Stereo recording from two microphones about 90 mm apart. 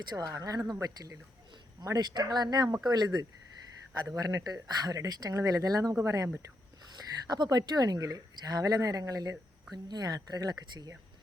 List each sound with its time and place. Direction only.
0.0 s a woman's voice: 50° right (ahead or behind)
5.9 s speech: 30° right (ahead or behind)
6.9 s a woman's voice: 50° right (ahead or behind)